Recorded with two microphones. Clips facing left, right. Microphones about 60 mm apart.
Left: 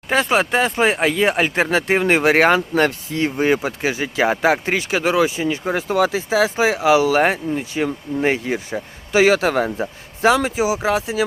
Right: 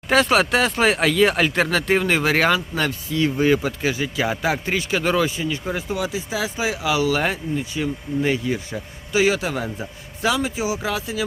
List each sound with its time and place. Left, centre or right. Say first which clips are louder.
0.1 s speech: even; centre
1.2 s speech: right 1 dB; left
3.3 s speech: left 1 dB; left
9.6 s speech: left 6 dB; left